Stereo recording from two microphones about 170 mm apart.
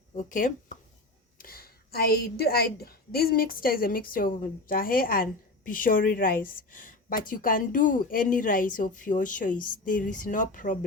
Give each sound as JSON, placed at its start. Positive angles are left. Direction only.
{"t": 0.2, "sound": "a woman's voice", "side_deg": 50}
{"t": 1.4, "sound": "a woman's voice", "side_deg": 60}